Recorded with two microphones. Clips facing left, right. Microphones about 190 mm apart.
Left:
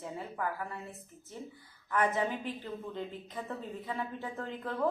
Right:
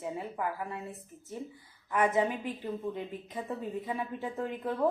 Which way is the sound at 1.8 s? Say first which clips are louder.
Right 3 dB; 15° right (ahead or behind).